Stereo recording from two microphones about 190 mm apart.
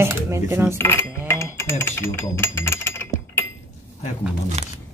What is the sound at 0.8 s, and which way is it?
Cutlery, 15° left (ahead or behind).